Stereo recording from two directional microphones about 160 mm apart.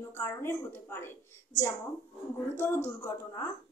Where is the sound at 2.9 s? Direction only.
20° left (ahead or behind).